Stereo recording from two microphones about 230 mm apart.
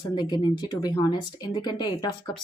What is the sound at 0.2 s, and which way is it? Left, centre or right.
A woman's voice, centre.